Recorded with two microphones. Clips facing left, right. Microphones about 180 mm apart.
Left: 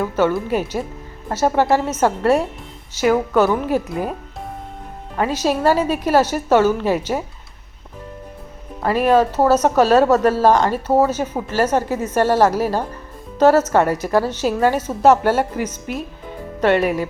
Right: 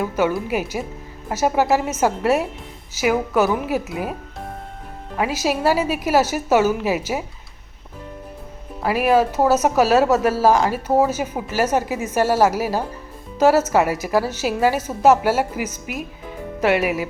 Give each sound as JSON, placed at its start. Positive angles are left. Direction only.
{"t": 0.0, "sound": "speech", "side_deg": -10}
{"t": 5.1, "sound": "speech", "side_deg": -10}
{"t": 8.8, "sound": "speech", "side_deg": -10}